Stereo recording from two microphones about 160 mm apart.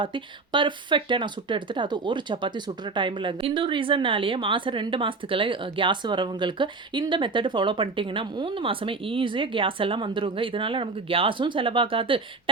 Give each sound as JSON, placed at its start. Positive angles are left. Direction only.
{"t": 0.0, "sound": "speech", "side_deg": -30}